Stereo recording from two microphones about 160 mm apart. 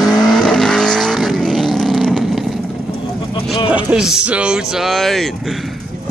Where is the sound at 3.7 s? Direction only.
5° right (ahead or behind).